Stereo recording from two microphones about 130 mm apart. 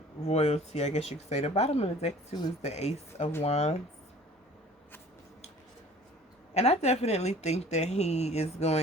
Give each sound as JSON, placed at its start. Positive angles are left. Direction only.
{"t": 0.2, "sound": "speech", "side_deg": 55}
{"t": 6.5, "sound": "speech", "side_deg": 55}